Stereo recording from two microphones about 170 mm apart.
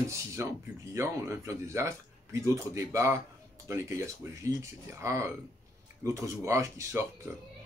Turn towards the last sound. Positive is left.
turn(degrees=-15)  # may be behind; listen again after turning